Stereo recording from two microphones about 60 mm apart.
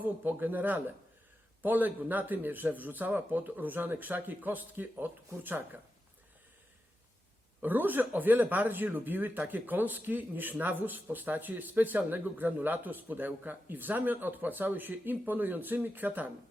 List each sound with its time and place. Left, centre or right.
0.0 s speech: right
7.6 s speech: right